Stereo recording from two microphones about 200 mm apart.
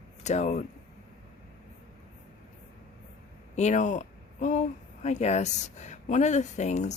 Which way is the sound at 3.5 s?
35° left (ahead or behind).